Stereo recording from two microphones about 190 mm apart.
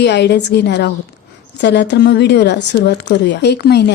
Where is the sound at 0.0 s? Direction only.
65° left (ahead or behind).